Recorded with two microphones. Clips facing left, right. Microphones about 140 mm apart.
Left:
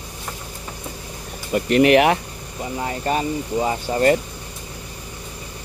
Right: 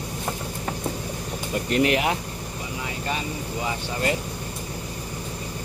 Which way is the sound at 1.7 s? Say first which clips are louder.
Left 8 dB; 70° left (ahead or behind).